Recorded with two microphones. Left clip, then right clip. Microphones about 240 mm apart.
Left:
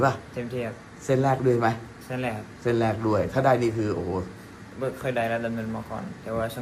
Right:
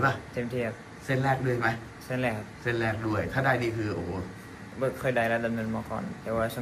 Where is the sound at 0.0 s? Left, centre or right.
Centre.